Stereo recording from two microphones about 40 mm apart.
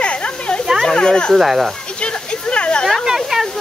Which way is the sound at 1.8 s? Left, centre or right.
Left.